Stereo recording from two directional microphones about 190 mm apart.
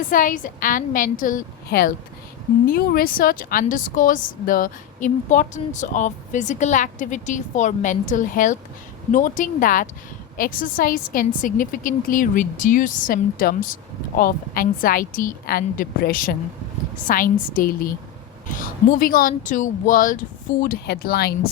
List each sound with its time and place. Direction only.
0.1 s a woman's voice: 45° left (ahead or behind)
18.9 s a woman's voice: 50° left (ahead or behind)